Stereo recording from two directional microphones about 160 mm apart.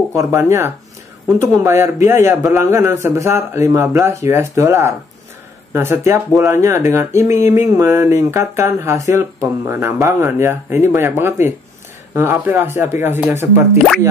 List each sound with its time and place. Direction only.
0.1 s speech: 20° right (ahead or behind)